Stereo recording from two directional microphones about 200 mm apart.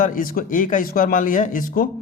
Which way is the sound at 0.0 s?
40° left (ahead or behind).